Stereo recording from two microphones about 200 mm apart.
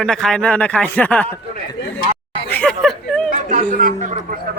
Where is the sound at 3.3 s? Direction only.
40° right (ahead or behind).